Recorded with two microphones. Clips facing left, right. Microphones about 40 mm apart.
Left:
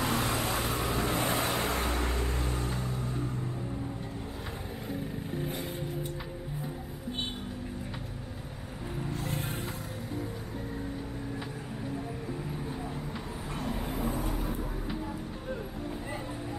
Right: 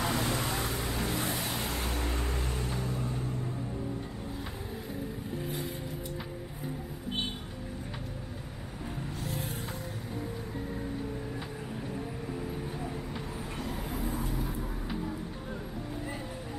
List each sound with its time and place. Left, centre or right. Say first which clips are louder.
0.0 s vehicle: left 1 dB; centre; by 2.1 s left
2.1 s music: left 1 dB; centre
9.1 s vehicle: left 3 dB; left
13.7 s vehicle: left 5 dB; centre
14.3 s vehicle: left 1 dB; left
14.6 s vehicle: even; centre